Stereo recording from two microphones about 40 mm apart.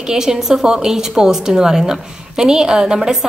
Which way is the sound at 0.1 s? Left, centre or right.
Centre.